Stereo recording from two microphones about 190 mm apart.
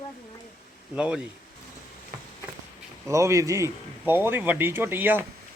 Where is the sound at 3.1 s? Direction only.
15° right (ahead or behind).